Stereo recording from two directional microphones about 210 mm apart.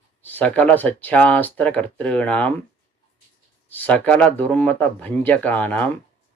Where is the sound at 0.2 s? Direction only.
10° left (ahead or behind).